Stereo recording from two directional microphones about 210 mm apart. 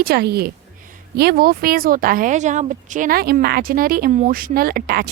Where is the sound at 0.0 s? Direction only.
50° right (ahead or behind).